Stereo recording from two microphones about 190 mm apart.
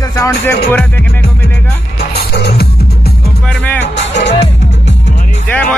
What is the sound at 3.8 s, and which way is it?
Speech, 65° left (ahead or behind).